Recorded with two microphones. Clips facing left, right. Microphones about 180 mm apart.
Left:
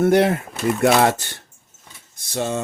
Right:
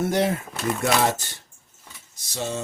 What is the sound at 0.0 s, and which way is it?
Speech, 65° left (ahead or behind).